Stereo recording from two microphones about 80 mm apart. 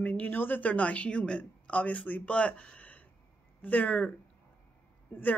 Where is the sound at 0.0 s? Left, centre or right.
Centre.